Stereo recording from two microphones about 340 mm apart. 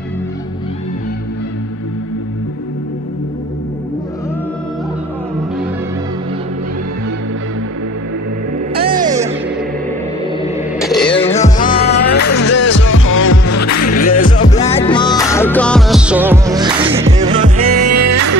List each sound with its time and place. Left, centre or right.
8.9 s music: centre
10.8 s music: centre
11.3 s music: centre
12.2 s music: left
13.3 s music: left
14.4 s music: centre
17.6 s music: right